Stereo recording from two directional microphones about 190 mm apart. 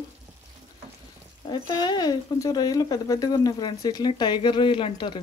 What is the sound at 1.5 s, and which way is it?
Speech, 20° left (ahead or behind).